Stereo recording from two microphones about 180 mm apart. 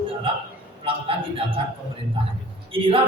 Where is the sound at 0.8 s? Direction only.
30° right (ahead or behind).